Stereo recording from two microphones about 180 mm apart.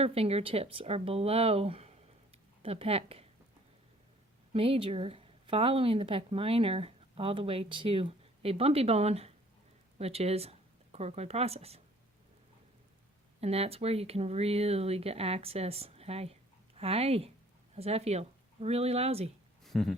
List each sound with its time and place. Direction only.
0.0 s a woman's voice: 35° right (ahead or behind)
4.5 s a woman's voice: 30° right (ahead or behind)
13.4 s a woman's voice: 35° right (ahead or behind)
19.6 s a sound: centre (ahead or behind)